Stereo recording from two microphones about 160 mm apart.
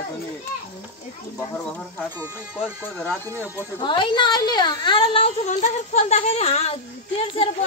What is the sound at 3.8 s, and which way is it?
A woman's voice, 30° left (ahead or behind).